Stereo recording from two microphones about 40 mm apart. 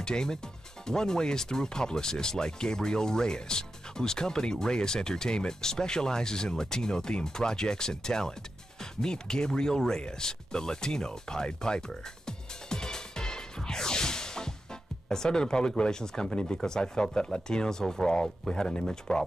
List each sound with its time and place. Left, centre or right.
0.0 s speech: centre
9.0 s a sound: centre
15.0 s speech: centre